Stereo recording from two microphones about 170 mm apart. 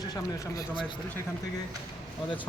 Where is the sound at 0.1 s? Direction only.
25° left (ahead or behind).